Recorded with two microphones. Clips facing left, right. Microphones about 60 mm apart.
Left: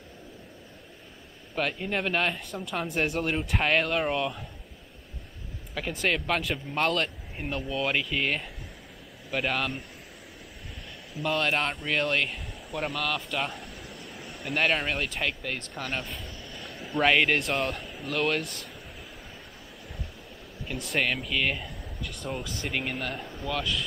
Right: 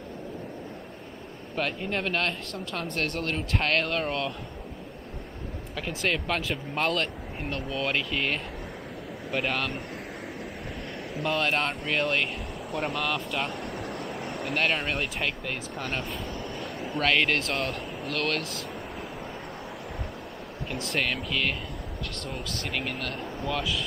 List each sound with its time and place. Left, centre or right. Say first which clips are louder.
1.5 s speech: even; centre
5.8 s speech: left 1 dB; centre
11.2 s speech: even; centre
13.8 s a sound: right 9 dB; right
14.4 s speech: left 1 dB; centre
16.6 s a sound: left 3 dB; centre
17.0 s speech: left 2 dB; centre
20.6 s speech: left 1 dB; centre
23.4 s speech: right 1 dB; centre